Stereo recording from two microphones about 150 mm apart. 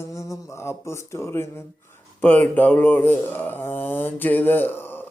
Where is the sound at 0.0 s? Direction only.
20° left (ahead or behind).